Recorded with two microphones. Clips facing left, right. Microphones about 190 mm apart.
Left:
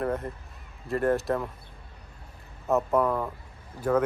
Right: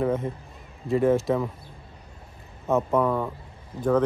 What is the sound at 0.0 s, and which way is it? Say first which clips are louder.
Speech: right 4 dB; centre (ahead or behind).